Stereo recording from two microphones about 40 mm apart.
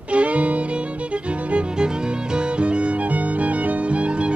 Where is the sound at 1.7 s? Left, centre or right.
Centre.